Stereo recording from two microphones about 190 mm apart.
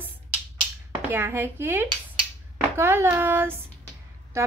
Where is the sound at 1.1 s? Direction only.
10° right (ahead or behind).